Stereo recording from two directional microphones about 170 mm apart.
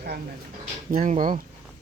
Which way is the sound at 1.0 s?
50° right (ahead or behind).